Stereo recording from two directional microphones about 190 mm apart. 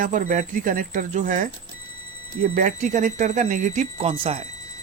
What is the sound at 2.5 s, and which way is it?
Speech, 45° right (ahead or behind).